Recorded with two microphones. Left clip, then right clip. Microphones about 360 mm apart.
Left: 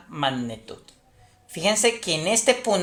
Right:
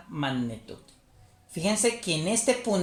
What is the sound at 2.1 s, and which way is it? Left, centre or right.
Speech, left.